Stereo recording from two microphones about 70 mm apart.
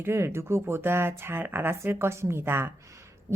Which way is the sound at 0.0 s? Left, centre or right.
Right.